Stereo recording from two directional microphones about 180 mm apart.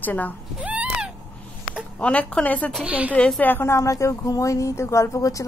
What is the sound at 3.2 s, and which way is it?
A woman's voice, 5° left (ahead or behind).